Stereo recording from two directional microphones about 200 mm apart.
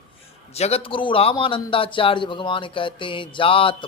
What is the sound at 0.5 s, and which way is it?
A man's voice, 30° left (ahead or behind).